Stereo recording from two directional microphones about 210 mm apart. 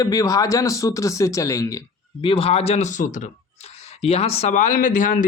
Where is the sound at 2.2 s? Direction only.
25° left (ahead or behind).